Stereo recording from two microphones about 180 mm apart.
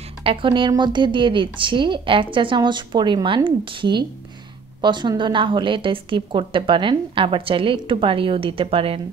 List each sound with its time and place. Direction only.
0.2 s a woman's voice: 30° right (ahead or behind)